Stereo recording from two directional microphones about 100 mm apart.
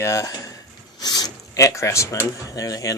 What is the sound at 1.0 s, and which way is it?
Speech, 40° left (ahead or behind).